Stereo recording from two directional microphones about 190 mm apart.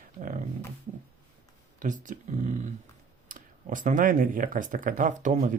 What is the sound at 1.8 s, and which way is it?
Speech, 40° right (ahead or behind).